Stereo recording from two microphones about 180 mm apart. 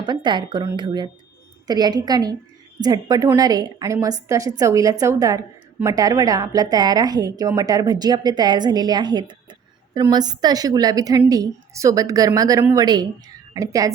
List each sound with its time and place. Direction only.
0.0 s a woman's voice: 25° right (ahead or behind)